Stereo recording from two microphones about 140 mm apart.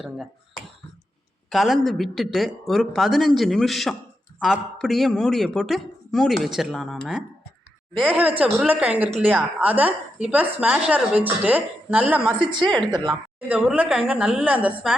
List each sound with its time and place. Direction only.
1.5 s speech: centre (ahead or behind)
12.4 s a woman's voice: 35° right (ahead or behind)
13.5 s speech: 10° right (ahead or behind)